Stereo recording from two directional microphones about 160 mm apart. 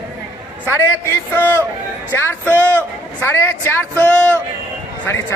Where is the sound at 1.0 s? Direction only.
15° left (ahead or behind).